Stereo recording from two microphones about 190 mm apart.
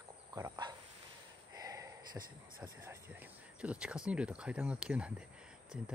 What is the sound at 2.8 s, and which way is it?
Speech, 10° right (ahead or behind).